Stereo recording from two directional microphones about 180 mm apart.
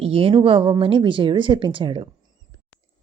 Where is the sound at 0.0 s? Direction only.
30° right (ahead or behind).